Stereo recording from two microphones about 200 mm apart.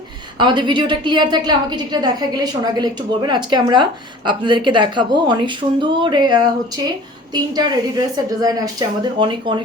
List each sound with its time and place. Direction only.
0.3 s a woman's voice: 25° right (ahead or behind)